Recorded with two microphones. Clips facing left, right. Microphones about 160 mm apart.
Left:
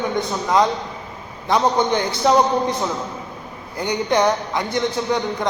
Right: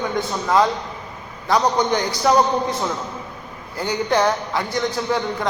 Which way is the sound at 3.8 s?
15° left (ahead or behind).